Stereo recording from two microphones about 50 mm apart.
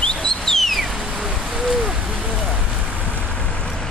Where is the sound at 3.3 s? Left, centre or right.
Centre.